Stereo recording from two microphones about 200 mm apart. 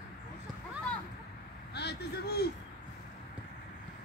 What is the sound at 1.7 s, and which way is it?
Vehicle, 55° left (ahead or behind).